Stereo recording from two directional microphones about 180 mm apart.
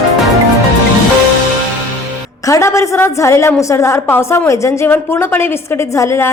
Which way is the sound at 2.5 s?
15° left (ahead or behind).